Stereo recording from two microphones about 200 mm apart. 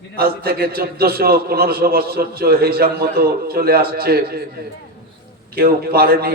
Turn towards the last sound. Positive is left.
turn(degrees=-50)  # may be behind; listen again after turning